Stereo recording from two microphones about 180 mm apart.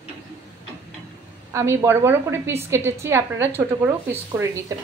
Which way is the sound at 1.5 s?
15° right (ahead or behind).